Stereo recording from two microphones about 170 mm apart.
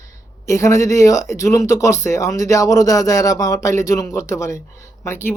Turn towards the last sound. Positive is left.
turn(degrees=15)  # may be behind; listen again after turning